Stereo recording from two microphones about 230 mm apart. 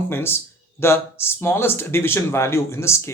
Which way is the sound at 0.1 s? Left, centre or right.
Centre.